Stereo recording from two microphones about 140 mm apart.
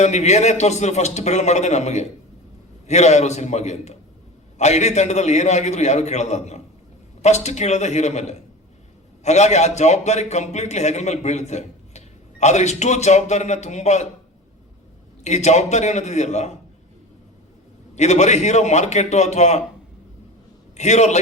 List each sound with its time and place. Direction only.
0.0 s a man's voice: 55° left (ahead or behind)
15.2 s a man's voice: 55° left (ahead or behind)
17.9 s a man's voice: 55° left (ahead or behind)
20.7 s a man's voice: 55° left (ahead or behind)